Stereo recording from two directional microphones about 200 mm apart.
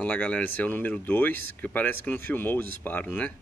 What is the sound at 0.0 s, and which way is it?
Speech, 5° left (ahead or behind).